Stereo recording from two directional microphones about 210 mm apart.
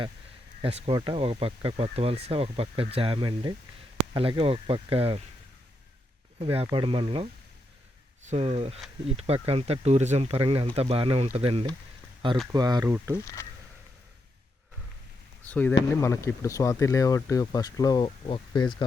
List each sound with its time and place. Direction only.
0.6 s speech: 25° right (ahead or behind)
6.4 s speech: 25° right (ahead or behind)
13.2 s speech: 15° left (ahead or behind)
15.4 s speech: 5° left (ahead or behind)